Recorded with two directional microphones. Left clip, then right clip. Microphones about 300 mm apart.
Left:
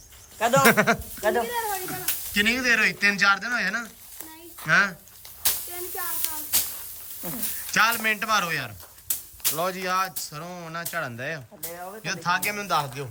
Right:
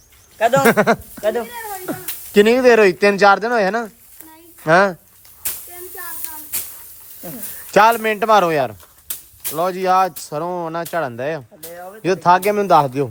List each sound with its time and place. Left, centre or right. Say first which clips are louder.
0.3 s speech: right 6 dB; right
0.6 s speech: right 5 dB; centre
6.0 s a sound: right 1 dB; centre
7.7 s speech: right 9 dB; centre